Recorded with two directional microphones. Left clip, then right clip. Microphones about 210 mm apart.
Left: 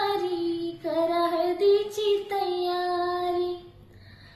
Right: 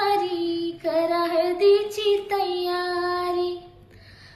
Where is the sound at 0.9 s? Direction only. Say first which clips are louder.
Right 2 dB; centre (ahead or behind).